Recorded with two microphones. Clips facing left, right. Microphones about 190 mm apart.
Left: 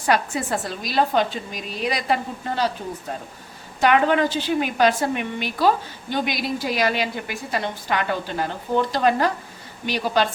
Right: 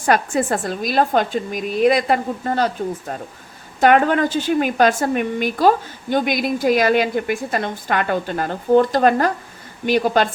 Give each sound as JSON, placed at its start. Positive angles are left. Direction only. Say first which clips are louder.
{"t": 0.0, "sound": "a woman's voice", "louder": "right 4 dB", "side_deg": -50}
{"t": 3.8, "sound": "a woman's voice", "louder": "right 3 dB", "side_deg": -50}